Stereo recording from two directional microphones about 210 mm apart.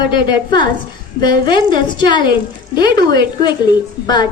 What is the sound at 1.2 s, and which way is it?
A woman's voice, 20° left (ahead or behind).